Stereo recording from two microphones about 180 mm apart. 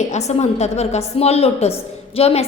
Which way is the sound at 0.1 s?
35° left (ahead or behind).